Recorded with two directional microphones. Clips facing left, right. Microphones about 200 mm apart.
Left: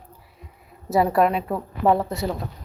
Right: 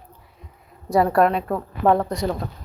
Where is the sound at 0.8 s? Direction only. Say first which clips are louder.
Right 1 dB; 5° left (ahead or behind).